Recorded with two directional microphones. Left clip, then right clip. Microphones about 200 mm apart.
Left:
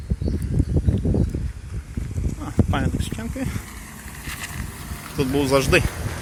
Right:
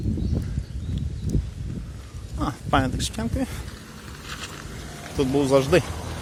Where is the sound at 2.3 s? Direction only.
30° right (ahead or behind).